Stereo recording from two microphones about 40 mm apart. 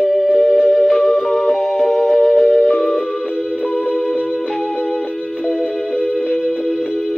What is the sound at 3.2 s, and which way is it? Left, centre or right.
Music, left.